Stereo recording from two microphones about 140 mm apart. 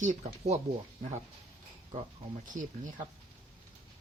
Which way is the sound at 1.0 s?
45° right (ahead or behind).